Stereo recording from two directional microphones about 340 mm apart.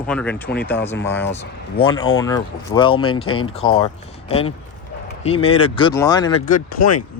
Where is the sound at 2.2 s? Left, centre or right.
Centre.